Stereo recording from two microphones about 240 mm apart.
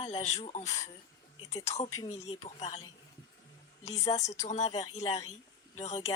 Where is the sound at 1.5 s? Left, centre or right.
Centre.